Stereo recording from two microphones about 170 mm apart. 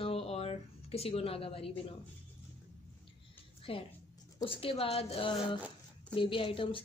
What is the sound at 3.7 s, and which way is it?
A woman's voice, 35° left (ahead or behind).